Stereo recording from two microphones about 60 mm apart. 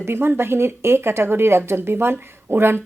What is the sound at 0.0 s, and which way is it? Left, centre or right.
Speech, right.